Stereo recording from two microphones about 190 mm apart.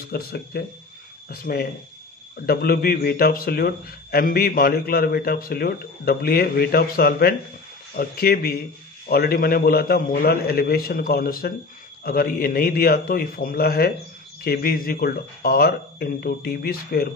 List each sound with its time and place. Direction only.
0.1 s speech: 55° left (ahead or behind)